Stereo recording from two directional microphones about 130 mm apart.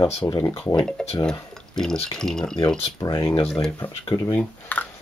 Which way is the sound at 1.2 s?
5° left (ahead or behind).